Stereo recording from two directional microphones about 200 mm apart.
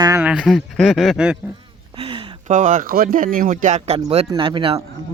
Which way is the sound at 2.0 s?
25° right (ahead or behind).